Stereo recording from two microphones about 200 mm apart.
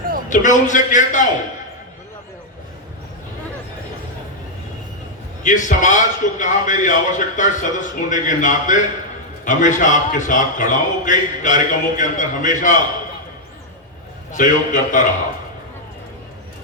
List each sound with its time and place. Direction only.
0.3 s a man's voice: 40° left (ahead or behind)
5.4 s a man's voice: 40° left (ahead or behind)
14.3 s a man's voice: 40° left (ahead or behind)